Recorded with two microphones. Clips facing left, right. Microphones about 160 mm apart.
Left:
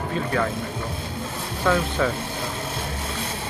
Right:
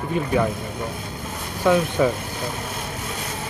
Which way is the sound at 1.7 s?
10° right (ahead or behind).